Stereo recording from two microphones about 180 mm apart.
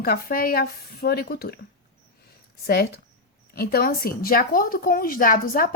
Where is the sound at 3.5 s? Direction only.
60° left (ahead or behind).